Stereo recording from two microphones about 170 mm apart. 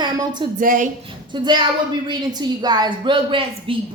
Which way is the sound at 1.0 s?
30° right (ahead or behind).